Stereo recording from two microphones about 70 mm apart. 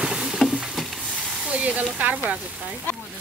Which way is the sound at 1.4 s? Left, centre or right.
Right.